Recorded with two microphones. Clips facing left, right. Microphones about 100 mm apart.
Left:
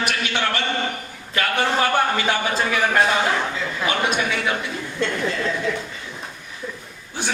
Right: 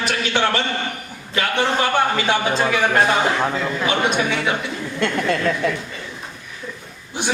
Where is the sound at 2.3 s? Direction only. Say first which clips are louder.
Right 3 dB; 20° right (ahead or behind).